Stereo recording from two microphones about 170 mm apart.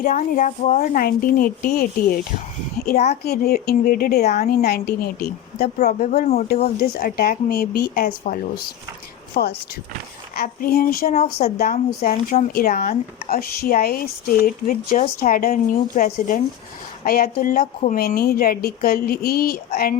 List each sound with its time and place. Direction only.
0.0 s a woman's voice: 50° left (ahead or behind)
4.2 s speech: 40° left (ahead or behind)
4.4 s a woman's voice: 65° left (ahead or behind)
5.8 s speech: 45° left (ahead or behind)
6.8 s speech: 65° left (ahead or behind)
8.0 s speech: 50° left (ahead or behind)
9.3 s speech: 70° left (ahead or behind)
11.1 s speech: 40° left (ahead or behind)
11.5 s speech: 65° left (ahead or behind)